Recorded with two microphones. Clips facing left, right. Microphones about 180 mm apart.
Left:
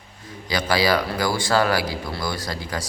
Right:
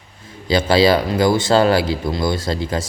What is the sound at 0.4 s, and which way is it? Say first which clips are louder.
Speech: right 7 dB; 25° right (ahead or behind).